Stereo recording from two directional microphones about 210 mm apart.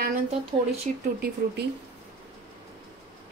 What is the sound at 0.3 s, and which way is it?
Speech, 30° right (ahead or behind).